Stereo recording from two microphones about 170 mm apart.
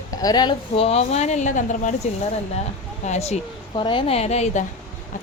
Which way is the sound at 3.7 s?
30° left (ahead or behind).